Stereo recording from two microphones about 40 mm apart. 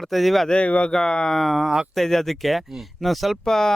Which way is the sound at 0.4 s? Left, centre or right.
Left.